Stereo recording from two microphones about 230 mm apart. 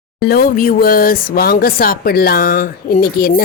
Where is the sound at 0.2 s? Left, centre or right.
Left.